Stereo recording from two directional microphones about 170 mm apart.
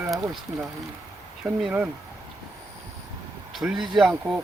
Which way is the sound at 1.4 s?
5° right (ahead or behind).